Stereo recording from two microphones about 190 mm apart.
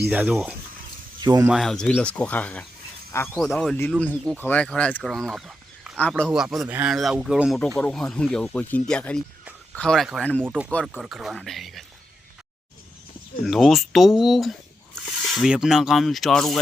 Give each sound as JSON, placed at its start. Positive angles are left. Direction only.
{"t": 0.1, "sound": "speech", "side_deg": -10}
{"t": 1.2, "sound": "speech", "side_deg": -20}
{"t": 1.5, "sound": "speech", "side_deg": 0}
{"t": 10.4, "sound": "speech", "side_deg": -5}
{"t": 13.4, "sound": "speech", "side_deg": 0}